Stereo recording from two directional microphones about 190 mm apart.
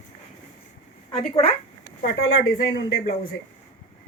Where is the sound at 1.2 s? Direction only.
30° left (ahead or behind).